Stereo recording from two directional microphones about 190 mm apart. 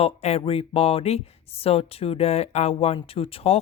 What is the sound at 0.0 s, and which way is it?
Speech, 35° left (ahead or behind).